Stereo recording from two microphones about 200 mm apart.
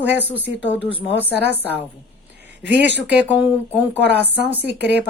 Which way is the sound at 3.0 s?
5° right (ahead or behind).